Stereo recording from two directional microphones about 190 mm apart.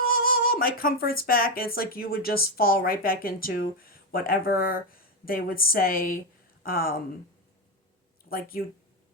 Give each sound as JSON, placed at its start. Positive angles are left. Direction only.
{"t": 0.0, "sound": "a woman's voice", "side_deg": 50}
{"t": 8.3, "sound": "speech", "side_deg": 50}